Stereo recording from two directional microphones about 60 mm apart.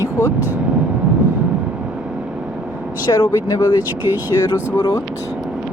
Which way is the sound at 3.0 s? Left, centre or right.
Left.